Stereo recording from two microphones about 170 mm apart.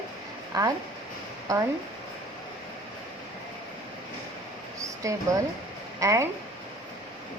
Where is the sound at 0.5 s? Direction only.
20° right (ahead or behind).